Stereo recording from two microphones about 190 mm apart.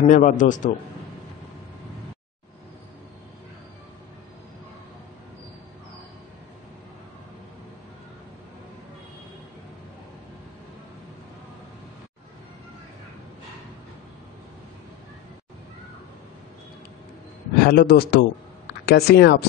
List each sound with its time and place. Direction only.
0.0 s a man's voice: 45° left (ahead or behind)
17.6 s a man's voice: 55° left (ahead or behind)